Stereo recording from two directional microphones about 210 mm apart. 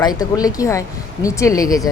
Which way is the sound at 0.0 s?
20° left (ahead or behind).